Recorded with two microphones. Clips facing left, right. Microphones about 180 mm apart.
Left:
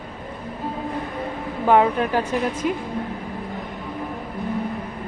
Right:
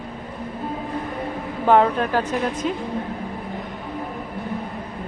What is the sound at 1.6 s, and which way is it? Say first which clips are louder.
Speech: even; 10° left (ahead or behind).